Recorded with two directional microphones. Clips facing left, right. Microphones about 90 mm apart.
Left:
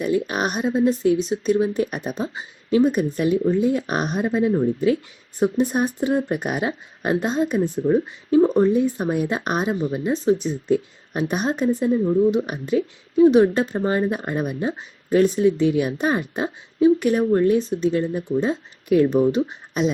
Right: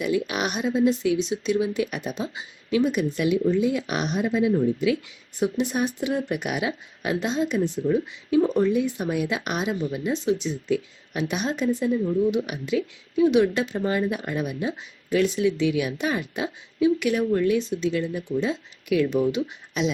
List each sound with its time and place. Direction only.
0.0 s speech: 40° left (ahead or behind)